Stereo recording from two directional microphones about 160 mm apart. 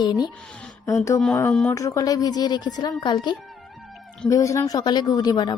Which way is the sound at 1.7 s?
20° left (ahead or behind).